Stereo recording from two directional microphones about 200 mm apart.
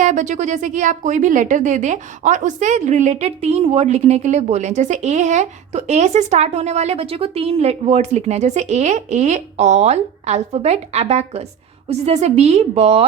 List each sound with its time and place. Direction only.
0.0 s a woman's voice: 40° right (ahead or behind)